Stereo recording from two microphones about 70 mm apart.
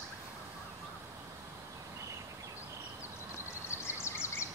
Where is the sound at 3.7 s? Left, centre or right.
Left.